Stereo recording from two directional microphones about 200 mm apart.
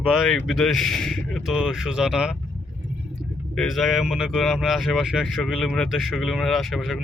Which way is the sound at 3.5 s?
Centre (ahead or behind).